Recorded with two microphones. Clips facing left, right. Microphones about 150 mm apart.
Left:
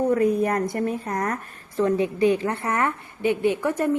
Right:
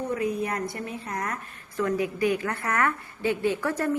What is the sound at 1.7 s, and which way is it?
A woman's voice, 25° left (ahead or behind).